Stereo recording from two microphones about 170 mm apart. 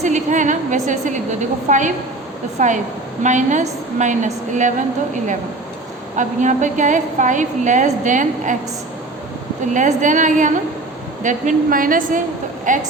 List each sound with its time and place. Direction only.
0.0 s a woman's voice: 45° right (ahead or behind)
9.7 s a woman's voice: 50° right (ahead or behind)